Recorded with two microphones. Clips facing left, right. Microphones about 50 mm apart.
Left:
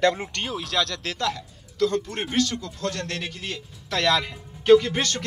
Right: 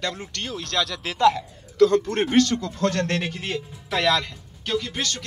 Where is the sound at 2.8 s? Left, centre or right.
Right.